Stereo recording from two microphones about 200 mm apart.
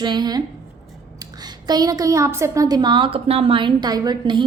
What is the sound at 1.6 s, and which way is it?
A woman's voice, 20° right (ahead or behind).